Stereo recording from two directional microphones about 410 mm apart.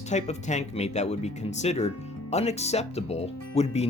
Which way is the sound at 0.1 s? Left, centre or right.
Centre.